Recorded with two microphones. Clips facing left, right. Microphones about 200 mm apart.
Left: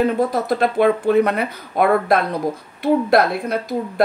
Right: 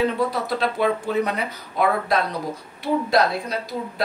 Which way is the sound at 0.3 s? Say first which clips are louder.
Left 5 dB; 50° left (ahead or behind).